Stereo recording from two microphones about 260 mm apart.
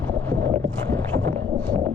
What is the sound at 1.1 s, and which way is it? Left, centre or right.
Boat, right.